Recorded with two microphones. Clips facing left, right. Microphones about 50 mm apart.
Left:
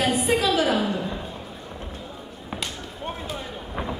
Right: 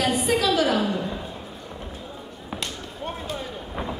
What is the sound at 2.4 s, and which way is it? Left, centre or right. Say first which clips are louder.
Basketball bounce: even; centre.